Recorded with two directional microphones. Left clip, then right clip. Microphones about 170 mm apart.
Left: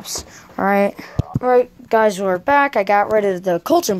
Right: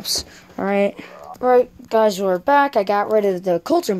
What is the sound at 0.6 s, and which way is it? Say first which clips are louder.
Speech: left 3 dB; centre (ahead or behind).